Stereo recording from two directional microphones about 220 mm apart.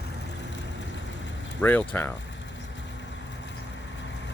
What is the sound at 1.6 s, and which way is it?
Speech, 10° left (ahead or behind).